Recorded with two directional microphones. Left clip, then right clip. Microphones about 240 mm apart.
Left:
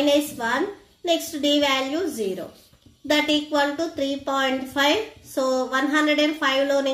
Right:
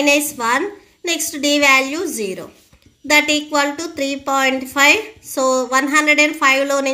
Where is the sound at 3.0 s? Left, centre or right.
Right.